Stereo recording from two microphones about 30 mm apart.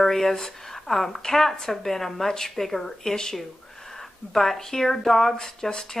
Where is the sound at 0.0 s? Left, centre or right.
Centre.